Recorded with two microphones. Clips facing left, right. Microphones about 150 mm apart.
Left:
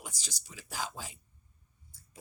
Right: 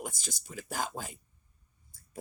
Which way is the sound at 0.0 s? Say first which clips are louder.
Right 8 dB; 50° right (ahead or behind).